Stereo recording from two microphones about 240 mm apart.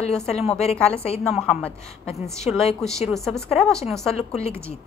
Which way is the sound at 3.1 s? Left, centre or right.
Centre.